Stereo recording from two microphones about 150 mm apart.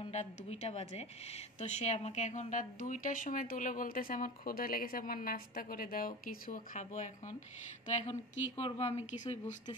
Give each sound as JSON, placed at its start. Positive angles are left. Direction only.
{"t": 0.0, "sound": "speech", "side_deg": 45}
{"t": 8.1, "sound": "speech", "side_deg": 40}